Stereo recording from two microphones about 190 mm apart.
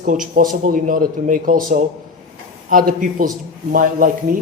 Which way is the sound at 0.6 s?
45° right (ahead or behind).